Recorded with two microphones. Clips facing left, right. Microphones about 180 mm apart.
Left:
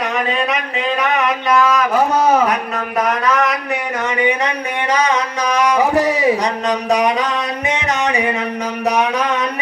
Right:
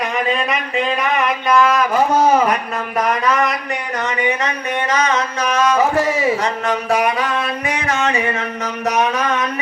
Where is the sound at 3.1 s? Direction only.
5° left (ahead or behind).